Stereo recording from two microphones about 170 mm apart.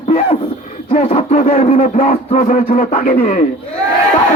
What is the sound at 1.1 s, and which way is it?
Speech, 45° left (ahead or behind).